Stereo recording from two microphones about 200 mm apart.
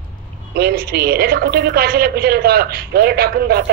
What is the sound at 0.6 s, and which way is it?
A woman's voice, 50° right (ahead or behind).